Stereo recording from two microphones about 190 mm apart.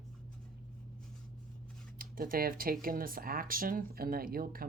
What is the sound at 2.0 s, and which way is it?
Speech, 50° right (ahead or behind).